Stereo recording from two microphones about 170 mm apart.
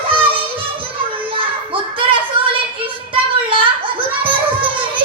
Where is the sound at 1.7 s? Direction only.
30° right (ahead or behind).